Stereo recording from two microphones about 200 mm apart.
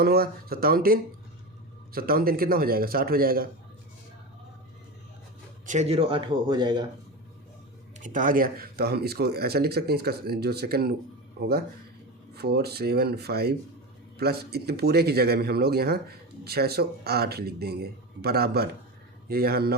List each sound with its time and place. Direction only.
0.0 s speech: 50° right (ahead or behind)
5.6 s speech: 35° right (ahead or behind)
8.0 s speech: 40° right (ahead or behind)